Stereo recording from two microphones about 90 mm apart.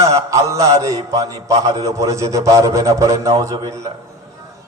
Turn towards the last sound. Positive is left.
turn(degrees=-35)  # may be behind; listen again after turning